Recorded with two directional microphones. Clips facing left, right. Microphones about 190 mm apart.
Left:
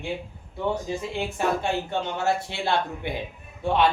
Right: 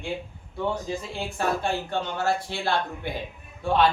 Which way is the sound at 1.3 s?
20° left (ahead or behind).